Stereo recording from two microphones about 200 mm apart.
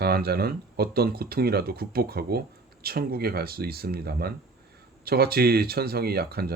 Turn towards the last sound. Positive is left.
turn(degrees=-50)  # may be behind; listen again after turning